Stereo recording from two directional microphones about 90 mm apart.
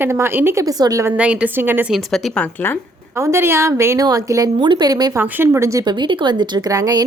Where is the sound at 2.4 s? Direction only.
25° left (ahead or behind).